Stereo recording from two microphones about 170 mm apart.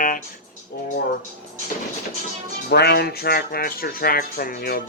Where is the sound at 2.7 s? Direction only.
75° left (ahead or behind).